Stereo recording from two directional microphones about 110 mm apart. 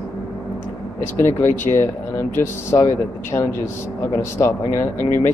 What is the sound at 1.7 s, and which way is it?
Speech, 20° left (ahead or behind).